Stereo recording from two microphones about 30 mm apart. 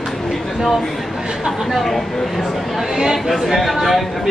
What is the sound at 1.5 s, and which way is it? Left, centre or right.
Speech, centre.